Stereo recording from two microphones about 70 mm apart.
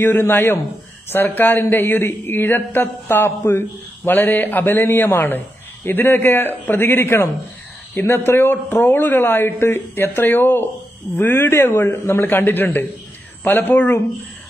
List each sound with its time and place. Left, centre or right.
0.0 s speech: left